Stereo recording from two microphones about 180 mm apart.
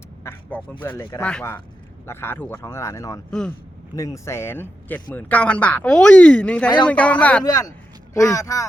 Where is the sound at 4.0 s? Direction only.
15° left (ahead or behind).